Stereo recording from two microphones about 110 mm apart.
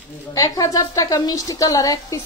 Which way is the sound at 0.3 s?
30° left (ahead or behind).